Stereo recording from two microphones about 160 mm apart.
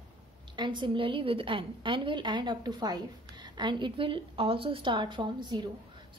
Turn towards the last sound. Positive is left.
turn(degrees=-25)  # may be behind; listen again after turning